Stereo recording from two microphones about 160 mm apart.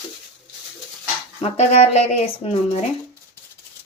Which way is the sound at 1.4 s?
40° left (ahead or behind).